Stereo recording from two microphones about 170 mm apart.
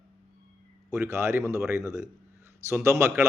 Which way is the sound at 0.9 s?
15° right (ahead or behind).